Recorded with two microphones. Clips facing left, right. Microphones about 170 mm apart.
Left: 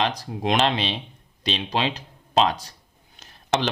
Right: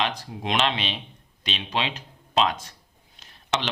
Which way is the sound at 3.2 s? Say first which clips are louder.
Left 4 dB; 40° left (ahead or behind).